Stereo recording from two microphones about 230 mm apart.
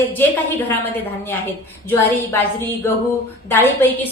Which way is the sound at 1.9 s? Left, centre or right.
Centre.